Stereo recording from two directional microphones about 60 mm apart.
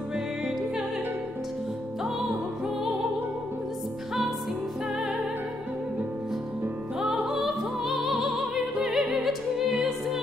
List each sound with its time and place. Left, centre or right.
7.0 s music: centre